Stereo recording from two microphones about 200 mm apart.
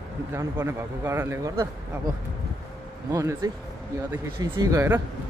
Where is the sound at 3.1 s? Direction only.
15° right (ahead or behind).